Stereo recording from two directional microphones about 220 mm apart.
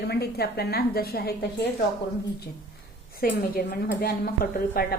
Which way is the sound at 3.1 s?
40° left (ahead or behind).